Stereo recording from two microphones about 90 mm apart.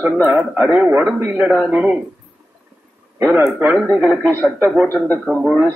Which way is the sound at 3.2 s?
25° right (ahead or behind).